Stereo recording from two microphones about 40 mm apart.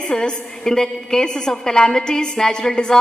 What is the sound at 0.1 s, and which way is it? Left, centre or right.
A woman's voice, centre.